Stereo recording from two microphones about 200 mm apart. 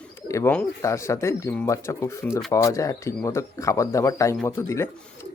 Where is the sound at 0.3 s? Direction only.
15° left (ahead or behind).